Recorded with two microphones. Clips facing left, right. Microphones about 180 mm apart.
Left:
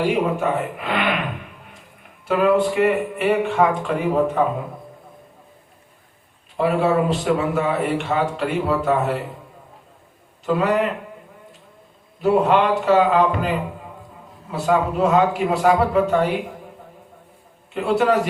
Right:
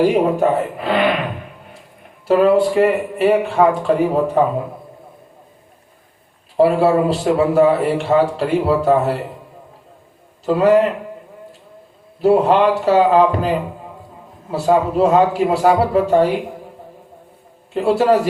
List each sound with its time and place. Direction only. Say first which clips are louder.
0.0 s a man's voice: right 6 dB; 35° right (ahead or behind)
2.2 s a man's voice: right 4 dB; 30° right (ahead or behind)
6.6 s a man's voice: right 5 dB; 35° right (ahead or behind)
10.4 s a man's voice: right 4 dB; 35° right (ahead or behind)
12.2 s a man's voice: right 4 dB; 35° right (ahead or behind)
14.5 s a man's voice: right 4 dB; 35° right (ahead or behind)
17.7 s a man's voice: right 4 dB; 30° right (ahead or behind)